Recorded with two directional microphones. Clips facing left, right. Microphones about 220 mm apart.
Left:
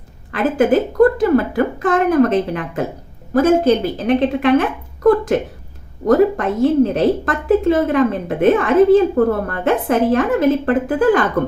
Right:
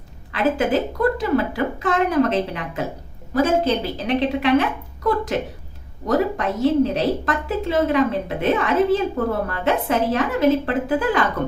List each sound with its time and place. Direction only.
0.3 s a woman's voice: 50° left (ahead or behind)